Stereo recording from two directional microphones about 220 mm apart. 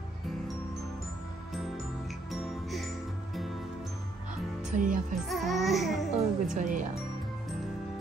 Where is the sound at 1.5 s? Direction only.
Centre (ahead or behind).